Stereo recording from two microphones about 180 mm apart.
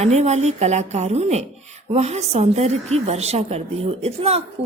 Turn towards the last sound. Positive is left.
turn(degrees=-35)  # may be behind; listen again after turning